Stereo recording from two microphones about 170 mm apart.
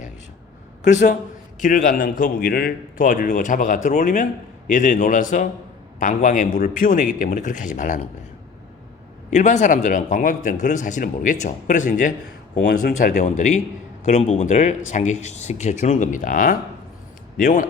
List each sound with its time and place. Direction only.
0.8 s a man's voice: 45° left (ahead or behind)
9.3 s a man's voice: 45° left (ahead or behind)